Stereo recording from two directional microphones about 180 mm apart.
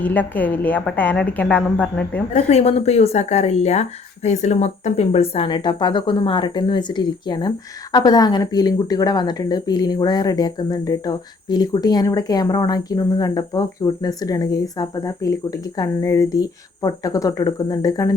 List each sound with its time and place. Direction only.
0.0 s a woman's voice: 10° left (ahead or behind)
2.3 s a woman's voice: 35° left (ahead or behind); by 18.1 s 20° left (ahead or behind)